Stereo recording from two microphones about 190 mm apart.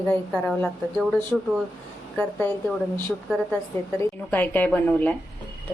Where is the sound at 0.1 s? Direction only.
5° left (ahead or behind).